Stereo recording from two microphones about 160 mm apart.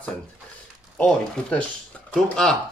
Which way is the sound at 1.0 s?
5° left (ahead or behind).